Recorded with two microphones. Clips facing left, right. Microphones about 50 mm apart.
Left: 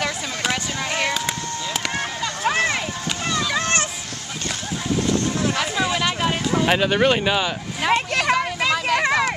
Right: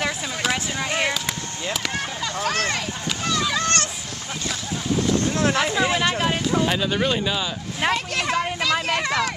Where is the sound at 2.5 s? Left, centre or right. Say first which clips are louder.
Left 5 dB; centre.